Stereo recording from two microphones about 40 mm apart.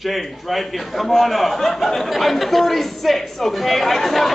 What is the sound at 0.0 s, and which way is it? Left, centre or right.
A man's voice, centre.